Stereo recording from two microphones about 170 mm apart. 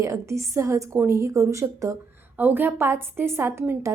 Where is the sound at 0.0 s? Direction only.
15° right (ahead or behind).